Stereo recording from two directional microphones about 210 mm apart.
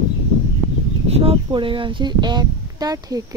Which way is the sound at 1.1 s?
25° right (ahead or behind).